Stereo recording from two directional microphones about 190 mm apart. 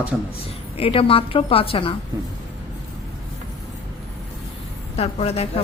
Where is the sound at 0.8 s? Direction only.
30° left (ahead or behind).